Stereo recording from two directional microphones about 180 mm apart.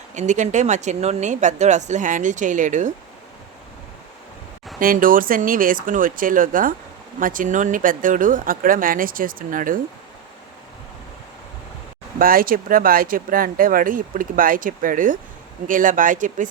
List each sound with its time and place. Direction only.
0.1 s a woman's voice: 40° right (ahead or behind)
4.8 s speech: 50° right (ahead or behind)
12.2 s speech: 55° right (ahead or behind)